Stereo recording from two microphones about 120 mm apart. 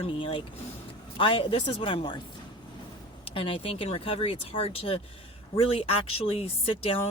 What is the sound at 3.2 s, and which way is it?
Speech, 45° left (ahead or behind).